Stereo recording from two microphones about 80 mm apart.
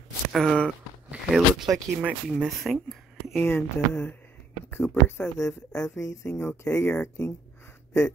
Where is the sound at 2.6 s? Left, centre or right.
Centre.